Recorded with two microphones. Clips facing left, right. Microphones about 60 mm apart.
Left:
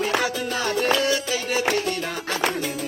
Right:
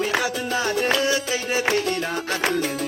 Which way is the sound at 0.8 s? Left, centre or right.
Right.